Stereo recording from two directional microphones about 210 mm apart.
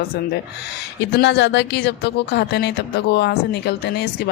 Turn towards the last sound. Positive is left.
turn(degrees=55)  # may be behind; listen again after turning